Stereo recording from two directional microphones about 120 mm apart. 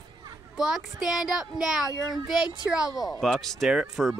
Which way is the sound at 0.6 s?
5° right (ahead or behind).